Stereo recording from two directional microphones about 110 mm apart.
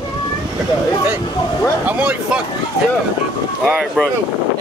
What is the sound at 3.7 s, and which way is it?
Speech, centre (ahead or behind).